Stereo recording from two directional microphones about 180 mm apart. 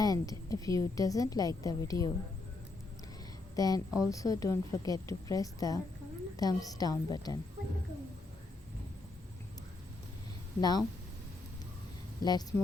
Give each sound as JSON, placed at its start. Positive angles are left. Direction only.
{"t": 0.0, "sound": "a woman's voice", "side_deg": 20}
{"t": 3.5, "sound": "a woman's voice", "side_deg": 20}
{"t": 10.6, "sound": "a woman's voice", "side_deg": 20}
{"t": 12.2, "sound": "a woman's voice", "side_deg": 20}